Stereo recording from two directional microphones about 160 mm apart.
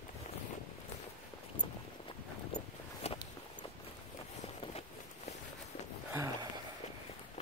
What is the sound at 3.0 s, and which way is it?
Walk, 40° left (ahead or behind).